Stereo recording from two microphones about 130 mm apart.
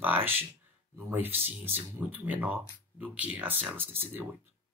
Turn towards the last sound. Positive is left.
turn(degrees=-15)  # may be behind; listen again after turning